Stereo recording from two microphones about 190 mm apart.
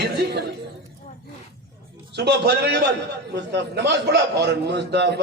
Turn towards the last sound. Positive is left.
turn(degrees=-65)  # may be behind; listen again after turning